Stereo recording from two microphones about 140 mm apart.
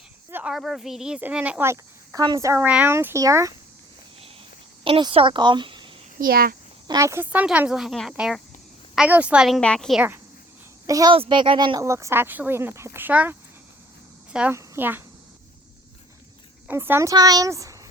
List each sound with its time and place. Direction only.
0.3 s a sound: 15° right (ahead or behind)
0.5 s speech: centre (ahead or behind); by 3.5 s 25° right (ahead or behind)
4.8 s speech: 35° right (ahead or behind)
6.1 s a child's voice: 90° right
6.8 s speech: 25° right (ahead or behind)
7.4 s a woman's voice: 5° right (ahead or behind)
9.6 s a woman's voice: 5° left (ahead or behind)
10.8 s a child's voice: 25° right (ahead or behind)
11.1 s speech: 35° right (ahead or behind)
11.8 s speech: 20° right (ahead or behind)
14.5 s speech: 15° right (ahead or behind)
16.6 s speech: 15° right (ahead or behind)